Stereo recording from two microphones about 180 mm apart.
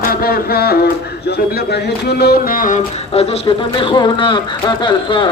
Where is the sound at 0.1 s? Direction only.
60° left (ahead or behind).